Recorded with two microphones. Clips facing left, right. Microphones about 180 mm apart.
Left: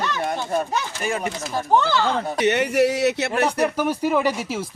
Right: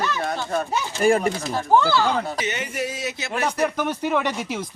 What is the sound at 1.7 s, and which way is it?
Speech, 10° right (ahead or behind).